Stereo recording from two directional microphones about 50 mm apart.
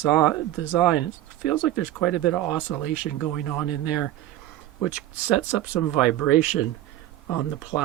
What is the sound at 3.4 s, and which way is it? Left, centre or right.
Speech, centre.